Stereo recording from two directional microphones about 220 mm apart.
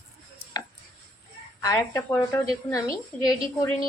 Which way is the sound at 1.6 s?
15° left (ahead or behind).